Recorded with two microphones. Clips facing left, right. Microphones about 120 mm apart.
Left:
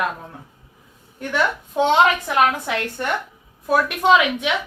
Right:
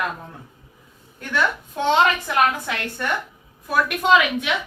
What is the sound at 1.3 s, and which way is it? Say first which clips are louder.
Speech: left 2 dB; 15° left (ahead or behind).